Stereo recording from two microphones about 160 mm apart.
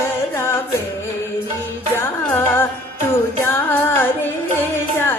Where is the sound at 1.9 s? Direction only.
15° left (ahead or behind).